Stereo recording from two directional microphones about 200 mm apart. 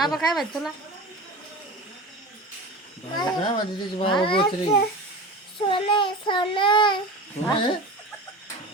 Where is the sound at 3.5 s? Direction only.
25° left (ahead or behind).